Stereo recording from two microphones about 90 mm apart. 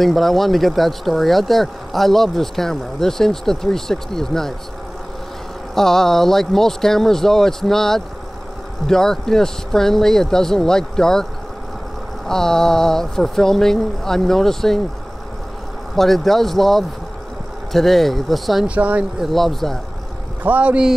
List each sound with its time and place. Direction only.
0.0 s speech: centre (ahead or behind)
5.8 s speech: 5° left (ahead or behind)
12.3 s speech: 5° left (ahead or behind)
16.0 s speech: 5° left (ahead or behind)
18.8 s speech: 15° right (ahead or behind)
19.1 s speech: centre (ahead or behind)
20.4 s speech: 15° right (ahead or behind)